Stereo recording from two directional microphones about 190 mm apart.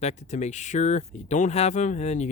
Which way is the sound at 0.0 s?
35° left (ahead or behind).